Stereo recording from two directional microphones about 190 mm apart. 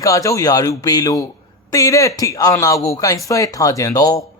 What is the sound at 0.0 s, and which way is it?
Speech, 15° left (ahead or behind).